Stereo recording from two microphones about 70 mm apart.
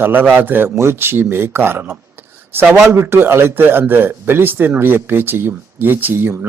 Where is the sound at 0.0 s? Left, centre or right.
Right.